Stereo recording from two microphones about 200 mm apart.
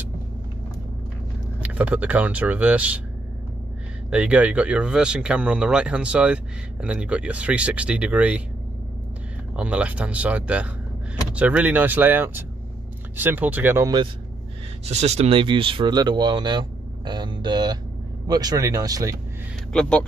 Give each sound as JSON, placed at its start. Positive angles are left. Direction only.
{"t": 1.6, "sound": "speech", "side_deg": -5}
{"t": 4.1, "sound": "speech", "side_deg": -5}
{"t": 9.6, "sound": "speech", "side_deg": -5}
{"t": 14.9, "sound": "speech", "side_deg": -30}
{"t": 19.7, "sound": "speech", "side_deg": 5}